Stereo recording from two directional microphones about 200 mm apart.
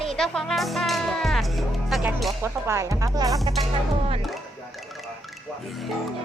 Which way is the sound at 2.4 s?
15° right (ahead or behind).